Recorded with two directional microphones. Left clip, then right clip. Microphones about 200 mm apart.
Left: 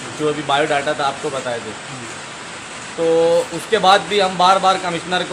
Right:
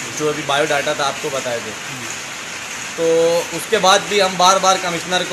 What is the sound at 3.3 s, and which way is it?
A man's voice, centre (ahead or behind).